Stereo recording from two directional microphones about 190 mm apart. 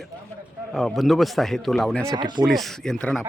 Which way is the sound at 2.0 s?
25° right (ahead or behind).